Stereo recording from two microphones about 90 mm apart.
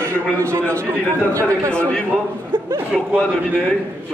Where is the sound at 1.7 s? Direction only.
10° left (ahead or behind).